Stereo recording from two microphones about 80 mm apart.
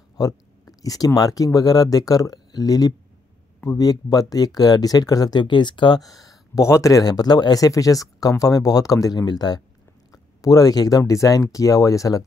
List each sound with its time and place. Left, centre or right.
0.7 s speech: left
6.0 s speech: left